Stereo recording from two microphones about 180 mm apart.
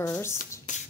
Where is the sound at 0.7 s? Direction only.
45° left (ahead or behind).